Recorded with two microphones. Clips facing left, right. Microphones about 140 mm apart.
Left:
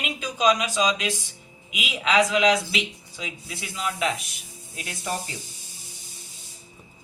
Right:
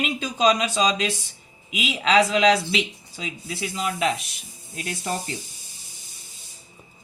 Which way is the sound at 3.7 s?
35° right (ahead or behind).